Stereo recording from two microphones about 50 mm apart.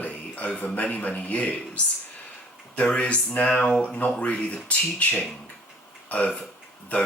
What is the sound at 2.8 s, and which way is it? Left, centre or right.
Speech, left.